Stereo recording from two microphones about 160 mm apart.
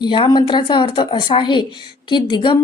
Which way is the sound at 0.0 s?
30° left (ahead or behind).